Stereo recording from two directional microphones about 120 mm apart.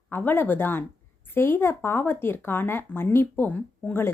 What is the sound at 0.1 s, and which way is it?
Speech, 15° left (ahead or behind).